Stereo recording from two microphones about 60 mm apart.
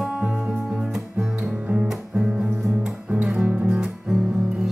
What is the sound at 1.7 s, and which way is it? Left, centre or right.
Music, centre.